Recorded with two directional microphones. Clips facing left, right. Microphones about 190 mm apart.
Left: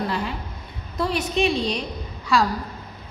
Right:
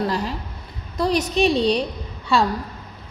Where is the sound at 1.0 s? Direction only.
40° right (ahead or behind).